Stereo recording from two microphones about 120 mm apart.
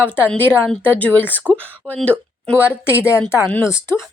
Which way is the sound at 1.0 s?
15° left (ahead or behind).